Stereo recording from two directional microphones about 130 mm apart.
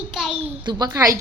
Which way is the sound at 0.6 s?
30° right (ahead or behind).